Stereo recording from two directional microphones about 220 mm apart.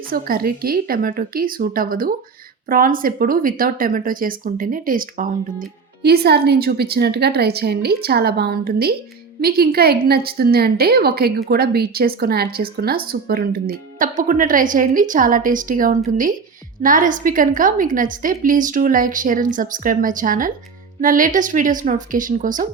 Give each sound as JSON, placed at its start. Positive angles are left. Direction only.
{"t": 0.1, "sound": "speech", "side_deg": -40}